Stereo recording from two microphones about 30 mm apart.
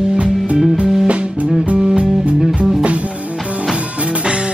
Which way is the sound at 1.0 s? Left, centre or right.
Right.